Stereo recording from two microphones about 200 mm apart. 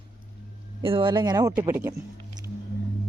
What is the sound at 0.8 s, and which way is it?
Speech, 25° right (ahead or behind).